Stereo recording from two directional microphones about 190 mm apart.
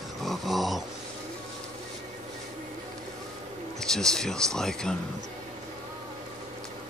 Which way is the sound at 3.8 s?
5° left (ahead or behind).